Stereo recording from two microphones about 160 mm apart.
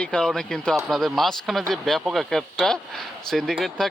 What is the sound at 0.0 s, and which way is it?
Speech, 5° left (ahead or behind).